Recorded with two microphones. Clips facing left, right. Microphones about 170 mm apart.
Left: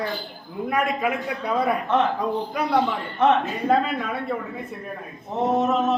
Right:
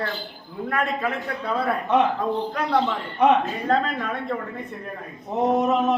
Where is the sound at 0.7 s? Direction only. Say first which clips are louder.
Left 2 dB; 15° left (ahead or behind).